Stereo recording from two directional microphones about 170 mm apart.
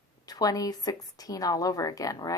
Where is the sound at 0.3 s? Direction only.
20° left (ahead or behind).